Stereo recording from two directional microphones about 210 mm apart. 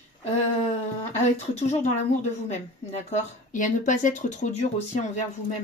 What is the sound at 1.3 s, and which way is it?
Speech, 30° left (ahead or behind).